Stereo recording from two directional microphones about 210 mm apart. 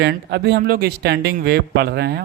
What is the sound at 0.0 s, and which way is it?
Speech, 55° right (ahead or behind).